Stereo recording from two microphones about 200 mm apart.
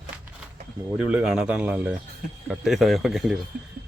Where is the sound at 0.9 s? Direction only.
5° right (ahead or behind).